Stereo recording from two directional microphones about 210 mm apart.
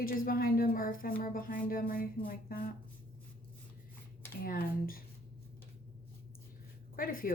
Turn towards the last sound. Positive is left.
turn(degrees=40)  # may be behind; listen again after turning